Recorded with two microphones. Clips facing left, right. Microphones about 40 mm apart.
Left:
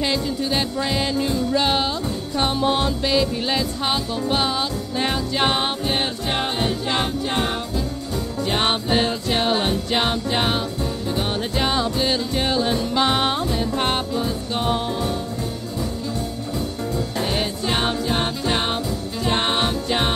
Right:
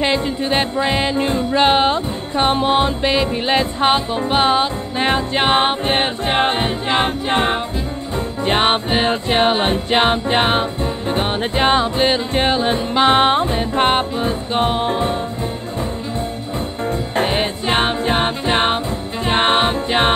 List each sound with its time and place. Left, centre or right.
0.0 s music: right
16.5 s music: right